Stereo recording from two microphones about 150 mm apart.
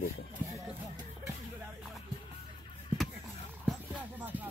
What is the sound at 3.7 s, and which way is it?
Music, 10° right (ahead or behind).